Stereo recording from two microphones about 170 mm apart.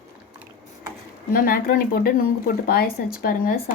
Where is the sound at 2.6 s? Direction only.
60° left (ahead or behind).